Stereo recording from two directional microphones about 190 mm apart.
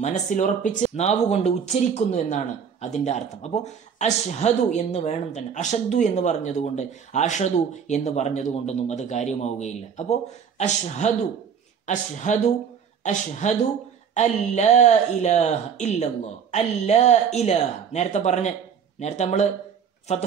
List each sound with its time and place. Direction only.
0.0 s speech: 40° left (ahead or behind)